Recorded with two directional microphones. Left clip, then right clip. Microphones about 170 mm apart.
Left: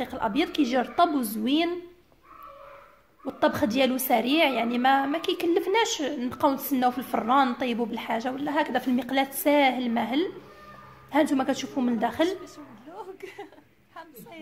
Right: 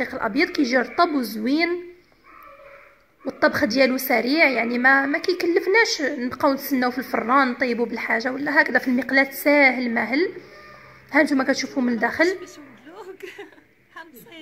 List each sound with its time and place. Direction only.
0.0 s a woman's voice: 5° right (ahead or behind)
0.3 s a woman's voice: 25° left (ahead or behind)
0.7 s a woman's voice: centre (ahead or behind)
3.3 s a woman's voice: centre (ahead or behind)
4.2 s a woman's voice: 25° left (ahead or behind)
4.9 s a woman's voice: centre (ahead or behind)
5.2 s a woman's voice: 25° left (ahead or behind)
5.9 s a woman's voice: centre (ahead or behind)
10.0 s a woman's voice: 25° left (ahead or behind)
11.1 s a man's voice: centre (ahead or behind)
12.9 s a sound: 5° left (ahead or behind)